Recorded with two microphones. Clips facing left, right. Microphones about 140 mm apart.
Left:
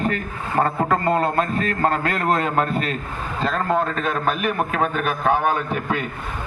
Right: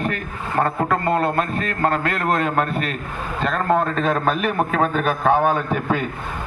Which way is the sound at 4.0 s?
30° right (ahead or behind).